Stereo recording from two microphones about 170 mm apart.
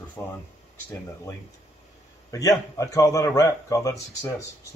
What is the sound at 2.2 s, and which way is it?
A man's voice, 20° left (ahead or behind).